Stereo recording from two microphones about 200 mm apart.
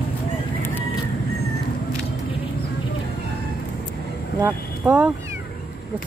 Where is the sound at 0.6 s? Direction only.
10° left (ahead or behind).